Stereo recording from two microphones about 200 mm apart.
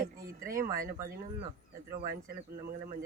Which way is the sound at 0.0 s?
45° right (ahead or behind).